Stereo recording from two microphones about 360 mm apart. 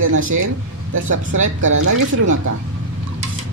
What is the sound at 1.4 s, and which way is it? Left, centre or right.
Speech, right.